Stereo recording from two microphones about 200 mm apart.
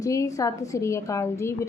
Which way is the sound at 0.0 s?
15° left (ahead or behind).